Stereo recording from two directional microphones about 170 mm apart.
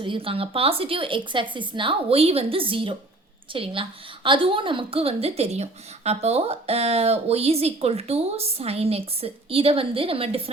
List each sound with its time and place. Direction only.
0.0 s speech: 30° right (ahead or behind)